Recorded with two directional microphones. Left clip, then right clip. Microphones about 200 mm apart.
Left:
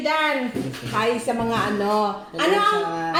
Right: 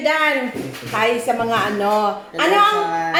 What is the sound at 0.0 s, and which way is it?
A woman's voice, 15° right (ahead or behind).